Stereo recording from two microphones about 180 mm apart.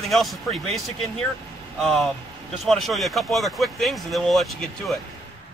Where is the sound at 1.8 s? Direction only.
Centre (ahead or behind).